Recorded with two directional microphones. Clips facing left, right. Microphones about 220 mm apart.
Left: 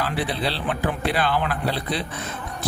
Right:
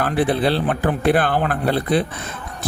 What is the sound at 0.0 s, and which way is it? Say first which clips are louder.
Speech: right 7 dB; 50° right (ahead or behind).